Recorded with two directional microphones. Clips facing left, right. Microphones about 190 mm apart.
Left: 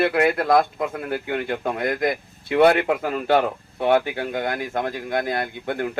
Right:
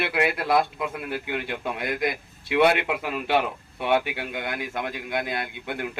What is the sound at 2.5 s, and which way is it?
Speech, 40° left (ahead or behind).